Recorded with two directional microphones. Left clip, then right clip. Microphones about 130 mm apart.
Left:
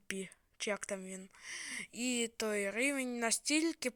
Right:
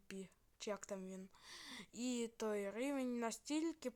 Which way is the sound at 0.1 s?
20° left (ahead or behind).